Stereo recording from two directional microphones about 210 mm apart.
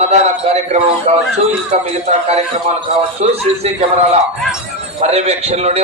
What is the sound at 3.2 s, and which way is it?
A man's voice, 30° right (ahead or behind).